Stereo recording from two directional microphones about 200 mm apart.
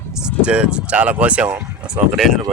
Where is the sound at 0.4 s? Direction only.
5° right (ahead or behind).